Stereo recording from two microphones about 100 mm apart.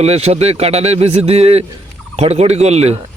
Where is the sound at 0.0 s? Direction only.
90° right.